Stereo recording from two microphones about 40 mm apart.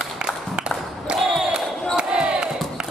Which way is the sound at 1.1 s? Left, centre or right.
Centre.